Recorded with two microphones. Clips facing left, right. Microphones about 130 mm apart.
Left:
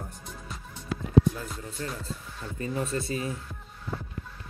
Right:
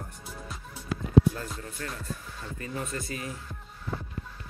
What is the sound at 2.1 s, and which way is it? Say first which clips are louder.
Speech: even; 25° left (ahead or behind).